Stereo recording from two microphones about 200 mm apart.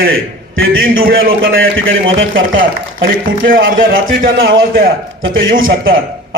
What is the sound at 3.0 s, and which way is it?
A man's voice, 50° right (ahead or behind).